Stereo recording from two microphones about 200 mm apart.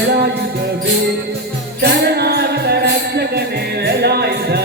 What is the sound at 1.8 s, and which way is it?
Music, 55° right (ahead or behind).